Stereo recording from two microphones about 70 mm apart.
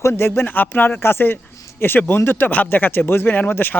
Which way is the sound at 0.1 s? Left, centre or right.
Left.